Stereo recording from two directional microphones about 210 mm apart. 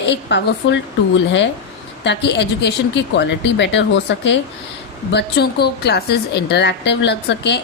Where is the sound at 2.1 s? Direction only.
55° left (ahead or behind).